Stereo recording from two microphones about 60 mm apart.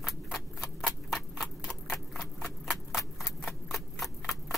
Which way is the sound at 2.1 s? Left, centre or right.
Centre.